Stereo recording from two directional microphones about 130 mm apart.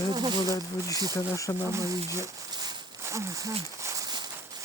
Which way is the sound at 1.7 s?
20° right (ahead or behind).